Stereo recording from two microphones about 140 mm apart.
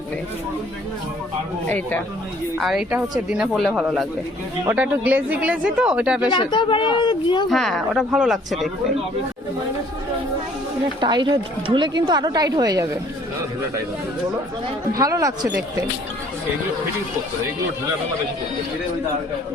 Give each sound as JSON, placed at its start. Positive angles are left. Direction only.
{"t": 1.6, "sound": "speech", "side_deg": 15}
{"t": 2.6, "sound": "speech", "side_deg": 0}
{"t": 4.6, "sound": "speech", "side_deg": -15}
{"t": 6.3, "sound": "speech", "side_deg": 35}
{"t": 7.5, "sound": "speech", "side_deg": 0}
{"t": 11.0, "sound": "a woman's voice", "side_deg": -35}
{"t": 14.9, "sound": "speech", "side_deg": -25}